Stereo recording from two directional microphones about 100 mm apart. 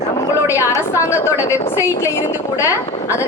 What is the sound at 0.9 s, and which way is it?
A woman's voice, 30° left (ahead or behind).